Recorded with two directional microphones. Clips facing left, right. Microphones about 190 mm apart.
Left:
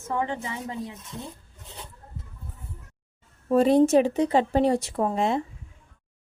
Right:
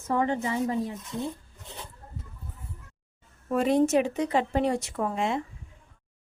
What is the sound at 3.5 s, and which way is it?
Speech, 35° left (ahead or behind).